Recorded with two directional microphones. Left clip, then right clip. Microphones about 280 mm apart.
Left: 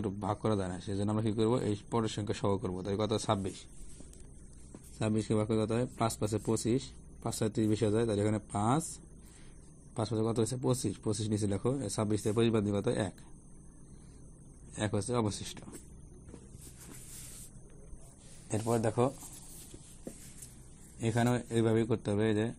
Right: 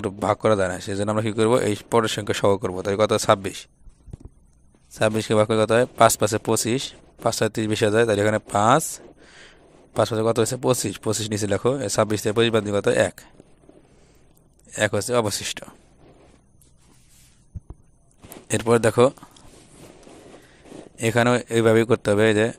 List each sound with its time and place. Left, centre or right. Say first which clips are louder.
0.0 s speech: right 14 dB; right
4.9 s speech: right 14 dB; right
9.9 s speech: right 13 dB; right
14.7 s speech: right 13 dB; right
18.5 s speech: right 13 dB; right
21.0 s speech: right 13 dB; right